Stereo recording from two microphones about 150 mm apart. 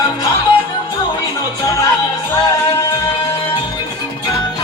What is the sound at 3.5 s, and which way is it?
Music, 30° left (ahead or behind).